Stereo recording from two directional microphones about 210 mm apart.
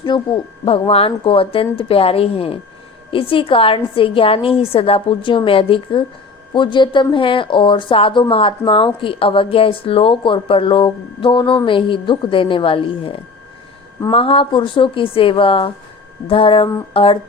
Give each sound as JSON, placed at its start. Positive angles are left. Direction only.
{"t": 0.1, "sound": "speech", "side_deg": 20}